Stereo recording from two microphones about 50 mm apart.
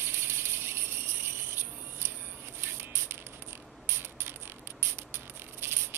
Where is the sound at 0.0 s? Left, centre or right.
Right.